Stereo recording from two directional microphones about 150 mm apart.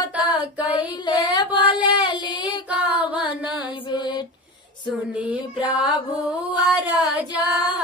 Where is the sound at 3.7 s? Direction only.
35° left (ahead or behind).